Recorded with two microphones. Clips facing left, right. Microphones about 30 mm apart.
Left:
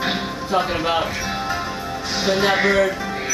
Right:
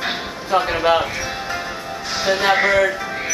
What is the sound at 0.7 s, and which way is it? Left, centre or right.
Speech, centre.